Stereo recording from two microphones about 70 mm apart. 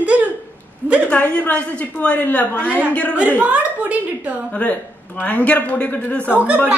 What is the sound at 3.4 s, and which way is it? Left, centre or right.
Speech, centre.